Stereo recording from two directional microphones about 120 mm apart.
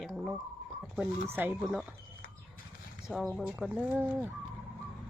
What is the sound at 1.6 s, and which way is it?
Turkey, centre (ahead or behind).